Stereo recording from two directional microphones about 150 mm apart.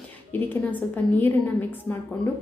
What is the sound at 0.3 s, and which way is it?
A woman's voice, 10° left (ahead or behind).